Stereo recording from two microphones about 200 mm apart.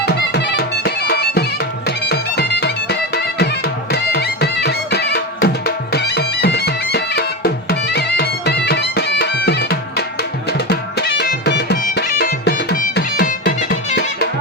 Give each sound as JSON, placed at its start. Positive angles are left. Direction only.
{"t": 0.0, "sound": "music", "side_deg": 55}
{"t": 11.2, "sound": "music", "side_deg": 55}